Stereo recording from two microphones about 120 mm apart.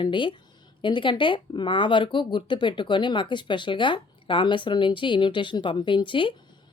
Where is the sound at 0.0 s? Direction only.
40° left (ahead or behind).